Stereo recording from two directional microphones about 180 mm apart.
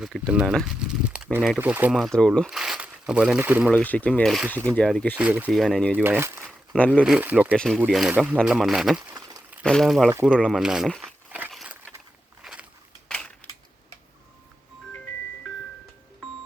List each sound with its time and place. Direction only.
0.0 s speech: 5° right (ahead or behind)
3.7 s speech: 10° left (ahead or behind)
5.1 s speech: 10° right (ahead or behind)
6.0 s speech: 10° right (ahead or behind)
6.7 s speech: 5° left (ahead or behind)
7.0 s speech: 5° right (ahead or behind)
7.5 s speech: 5° left (ahead or behind)
9.1 s a sound: 20° right (ahead or behind)
9.6 s speech: centre (ahead or behind)
10.2 s crumpling: 5° left (ahead or behind)
12.4 s a sound: 5° right (ahead or behind)
13.1 s crushing: 5° left (ahead or behind)